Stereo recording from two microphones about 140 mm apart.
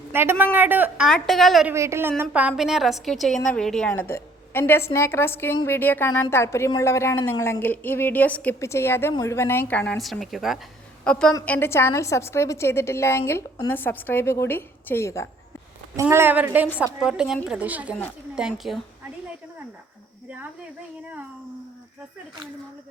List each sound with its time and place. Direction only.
0.1 s speech: 15° right (ahead or behind)
1.0 s a woman's voice: centre (ahead or behind)
1.6 s a woman's voice: 20° right (ahead or behind); by 10.0 s 10° left (ahead or behind)
10.0 s a woman's voice: centre (ahead or behind); by 15.3 s 20° left (ahead or behind)
16.0 s a woman's voice: 20° right (ahead or behind); by 18.8 s centre (ahead or behind)